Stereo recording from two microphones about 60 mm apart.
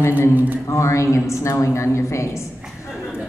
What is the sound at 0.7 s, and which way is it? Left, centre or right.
A woman's voice, left.